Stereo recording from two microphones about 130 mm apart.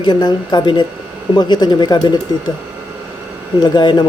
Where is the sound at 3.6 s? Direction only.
35° left (ahead or behind).